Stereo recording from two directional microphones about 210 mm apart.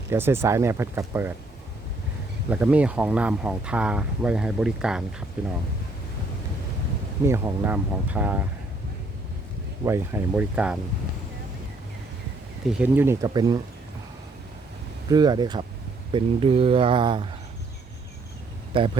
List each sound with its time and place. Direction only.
0.1 s speech: 10° right (ahead or behind)
2.5 s speech: 5° right (ahead or behind)
7.3 s speech: 10° right (ahead or behind)
9.8 s speech: 10° right (ahead or behind)
12.7 s speech: 10° right (ahead or behind)
15.1 s speech: 20° right (ahead or behind)